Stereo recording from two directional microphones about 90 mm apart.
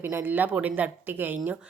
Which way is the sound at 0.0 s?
20° right (ahead or behind).